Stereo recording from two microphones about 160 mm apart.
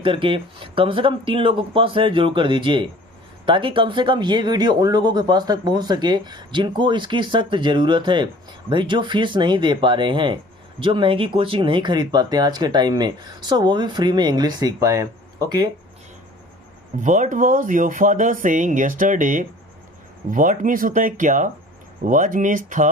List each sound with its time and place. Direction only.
0.0 s speech: 35° right (ahead or behind)
17.0 s speech: 50° right (ahead or behind)